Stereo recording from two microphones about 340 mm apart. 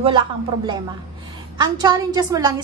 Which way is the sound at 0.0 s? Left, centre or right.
Centre.